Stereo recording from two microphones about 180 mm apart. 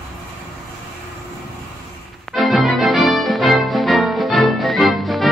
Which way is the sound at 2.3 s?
Centre (ahead or behind).